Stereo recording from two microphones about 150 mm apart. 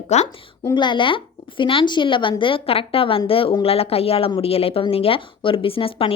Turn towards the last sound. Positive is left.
turn(degrees=40)  # may be behind; listen again after turning